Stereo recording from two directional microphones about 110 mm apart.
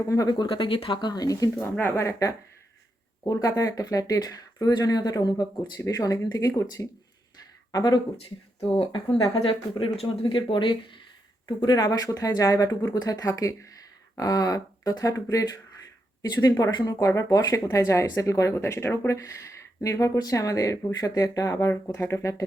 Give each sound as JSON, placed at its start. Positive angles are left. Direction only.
{"t": 0.0, "sound": "speech", "side_deg": 30}
{"t": 0.4, "sound": "speech", "side_deg": 50}
{"t": 1.5, "sound": "speech", "side_deg": 15}
{"t": 9.4, "sound": "speech", "side_deg": 55}